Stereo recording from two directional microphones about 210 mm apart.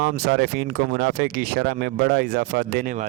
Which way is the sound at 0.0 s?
50° right (ahead or behind).